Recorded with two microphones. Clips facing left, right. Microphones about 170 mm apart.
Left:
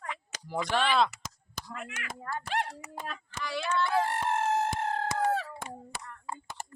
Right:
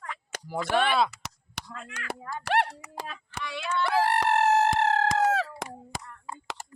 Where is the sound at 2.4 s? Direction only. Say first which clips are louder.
Right 8 dB; 65° right (ahead or behind).